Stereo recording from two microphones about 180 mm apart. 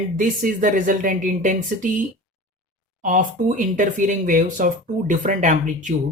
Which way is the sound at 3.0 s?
45° right (ahead or behind).